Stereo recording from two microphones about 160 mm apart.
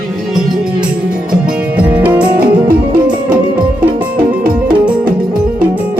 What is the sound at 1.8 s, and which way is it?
Music, 10° right (ahead or behind).